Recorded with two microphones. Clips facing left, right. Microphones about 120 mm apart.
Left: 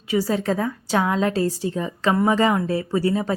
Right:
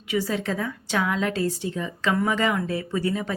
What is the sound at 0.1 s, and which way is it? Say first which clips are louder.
A woman's voice: left 4 dB; 40° left (ahead or behind).